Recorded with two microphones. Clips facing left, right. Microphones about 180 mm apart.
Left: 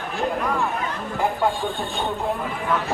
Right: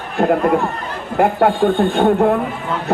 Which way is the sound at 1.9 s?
65° right (ahead or behind).